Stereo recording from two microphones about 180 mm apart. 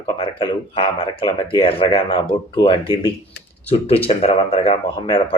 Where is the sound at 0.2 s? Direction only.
30° left (ahead or behind).